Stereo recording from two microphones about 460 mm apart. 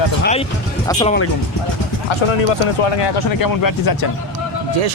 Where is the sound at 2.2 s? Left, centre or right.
Left.